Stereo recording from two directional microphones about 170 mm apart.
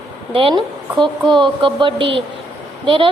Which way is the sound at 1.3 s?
30° right (ahead or behind).